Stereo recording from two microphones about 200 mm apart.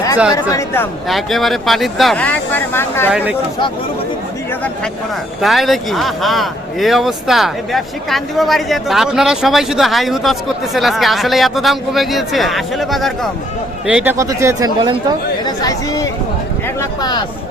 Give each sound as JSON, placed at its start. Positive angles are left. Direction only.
{"t": 0.5, "sound": "speech", "side_deg": 10}
{"t": 1.0, "sound": "speech", "side_deg": 0}
{"t": 3.1, "sound": "a man's voice", "side_deg": -5}
{"t": 5.4, "sound": "a man's voice", "side_deg": 0}
{"t": 15.4, "sound": "speech", "side_deg": 20}